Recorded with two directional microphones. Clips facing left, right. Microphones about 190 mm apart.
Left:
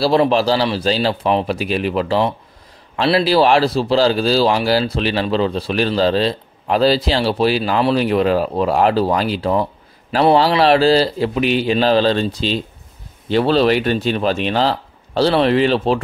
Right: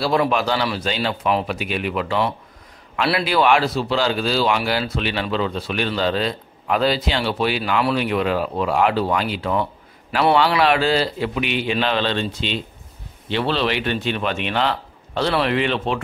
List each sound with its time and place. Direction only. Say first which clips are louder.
0.0 s speech: left 5 dB; 30° left (ahead or behind)